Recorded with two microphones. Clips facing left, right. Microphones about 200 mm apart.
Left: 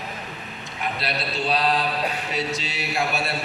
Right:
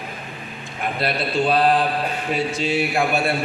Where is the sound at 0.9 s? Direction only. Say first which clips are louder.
Right 9 dB; 50° right (ahead or behind).